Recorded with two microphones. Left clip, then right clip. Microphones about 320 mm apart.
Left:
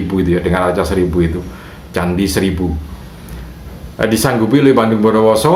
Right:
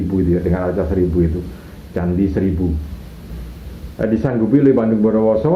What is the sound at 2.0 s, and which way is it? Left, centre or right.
Speech, left.